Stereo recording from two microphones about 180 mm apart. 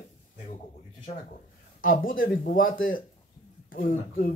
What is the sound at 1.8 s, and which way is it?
Speech, 50° left (ahead or behind).